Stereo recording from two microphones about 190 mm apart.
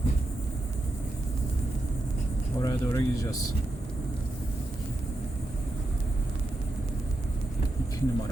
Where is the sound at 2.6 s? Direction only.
20° left (ahead or behind).